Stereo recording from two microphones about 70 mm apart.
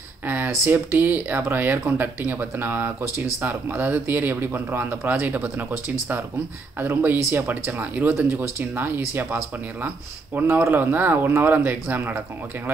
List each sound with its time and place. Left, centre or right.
0.7 s speech: right
10.4 s speech: right